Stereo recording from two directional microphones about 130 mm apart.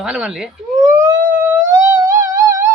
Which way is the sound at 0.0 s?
5° right (ahead or behind).